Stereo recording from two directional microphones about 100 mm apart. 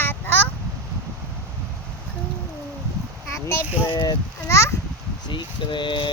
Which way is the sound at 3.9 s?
45° left (ahead or behind).